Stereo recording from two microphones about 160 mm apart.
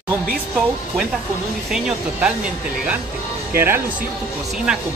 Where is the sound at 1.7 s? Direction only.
5° right (ahead or behind).